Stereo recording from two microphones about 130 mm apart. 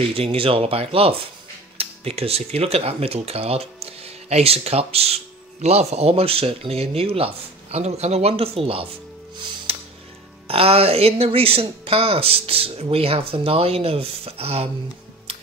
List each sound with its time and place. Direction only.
0.1 s speech: 45° right (ahead or behind)
9.7 s music: 50° right (ahead or behind)
10.5 s speech: 50° right (ahead or behind)